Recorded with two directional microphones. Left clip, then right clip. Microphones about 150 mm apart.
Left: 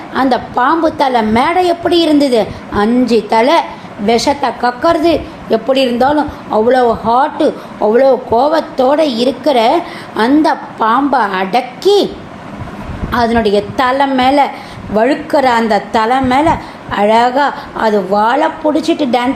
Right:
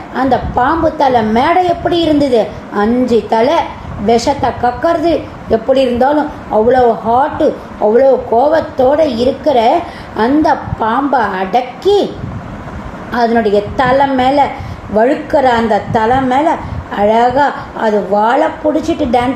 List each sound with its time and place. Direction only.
0.1 s a woman's voice: 30° left (ahead or behind)
13.1 s a woman's voice: 35° left (ahead or behind)